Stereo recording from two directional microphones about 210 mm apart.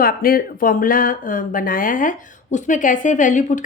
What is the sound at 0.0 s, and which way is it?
Speech, 45° left (ahead or behind).